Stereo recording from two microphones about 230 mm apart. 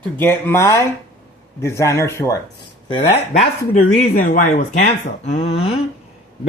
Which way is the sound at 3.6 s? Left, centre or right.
Left.